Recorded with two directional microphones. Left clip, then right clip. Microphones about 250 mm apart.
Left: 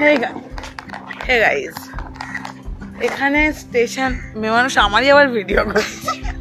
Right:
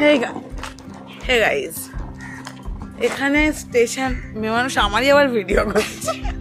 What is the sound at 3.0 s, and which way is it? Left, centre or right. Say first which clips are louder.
Speech: left 2 dB; centre.